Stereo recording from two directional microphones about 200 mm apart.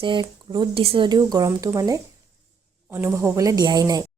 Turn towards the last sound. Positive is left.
turn(degrees=-20)  # may be behind; listen again after turning